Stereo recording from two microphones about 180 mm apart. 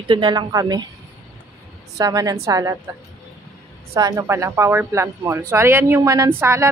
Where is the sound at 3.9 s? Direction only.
15° right (ahead or behind).